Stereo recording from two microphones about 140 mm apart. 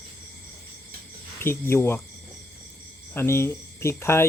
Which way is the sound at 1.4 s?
20° left (ahead or behind).